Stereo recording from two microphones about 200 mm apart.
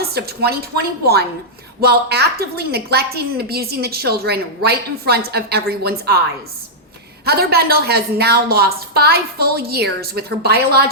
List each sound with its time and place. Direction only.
0.0 s a woman's voice: 50° right (ahead or behind)
7.3 s a woman's voice: 50° right (ahead or behind)